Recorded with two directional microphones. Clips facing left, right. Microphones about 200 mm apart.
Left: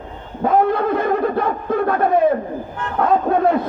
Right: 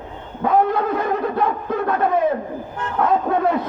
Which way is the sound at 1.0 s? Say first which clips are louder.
Left 3 dB; 50° left (ahead or behind).